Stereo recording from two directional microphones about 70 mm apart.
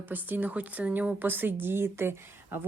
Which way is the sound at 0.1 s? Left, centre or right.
Right.